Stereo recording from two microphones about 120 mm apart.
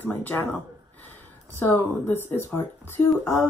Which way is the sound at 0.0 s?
15° left (ahead or behind).